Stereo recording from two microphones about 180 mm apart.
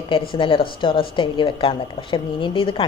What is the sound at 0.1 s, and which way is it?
Speech, 30° left (ahead or behind).